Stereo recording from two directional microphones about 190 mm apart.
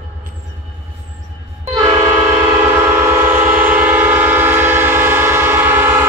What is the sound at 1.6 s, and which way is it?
Train, 20° right (ahead or behind).